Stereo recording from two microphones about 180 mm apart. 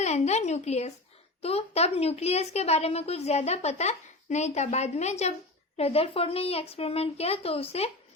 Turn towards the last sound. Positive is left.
turn(degrees=35)  # may be behind; listen again after turning